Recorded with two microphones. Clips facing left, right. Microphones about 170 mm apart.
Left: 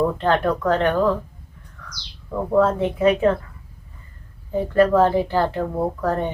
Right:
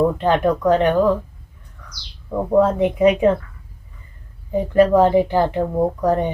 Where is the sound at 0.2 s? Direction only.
15° right (ahead or behind).